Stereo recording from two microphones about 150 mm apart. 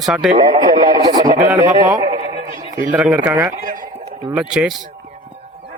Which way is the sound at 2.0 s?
25° right (ahead or behind).